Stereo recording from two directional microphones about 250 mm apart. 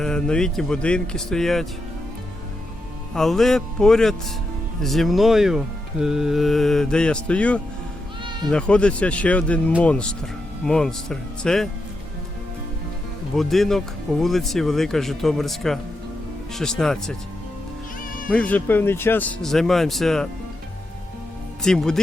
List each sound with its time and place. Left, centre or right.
0.0 s speech: centre
3.2 s speech: centre
8.2 s bleat: centre
8.4 s speech: centre
13.3 s speech: centre
18.3 s speech: centre
21.6 s speech: centre